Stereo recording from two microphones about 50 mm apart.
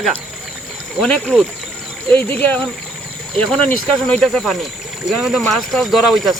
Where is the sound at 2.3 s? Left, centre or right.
Left.